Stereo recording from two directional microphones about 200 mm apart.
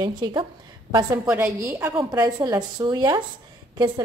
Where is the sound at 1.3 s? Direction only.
5° right (ahead or behind).